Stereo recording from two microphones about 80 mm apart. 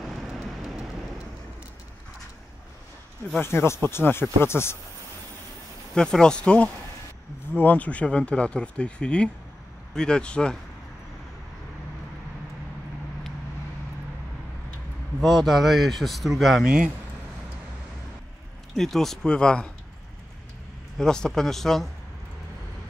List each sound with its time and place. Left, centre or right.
0.0 s vehicle: centre
3.3 s speech: left
5.9 s speech: centre
15.1 s speech: centre
18.8 s speech: centre
21.0 s speech: centre